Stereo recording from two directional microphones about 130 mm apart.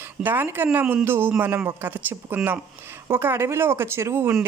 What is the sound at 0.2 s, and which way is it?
Speech, 15° right (ahead or behind).